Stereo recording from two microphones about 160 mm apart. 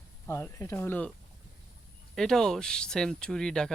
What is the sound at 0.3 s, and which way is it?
Speech, 15° left (ahead or behind).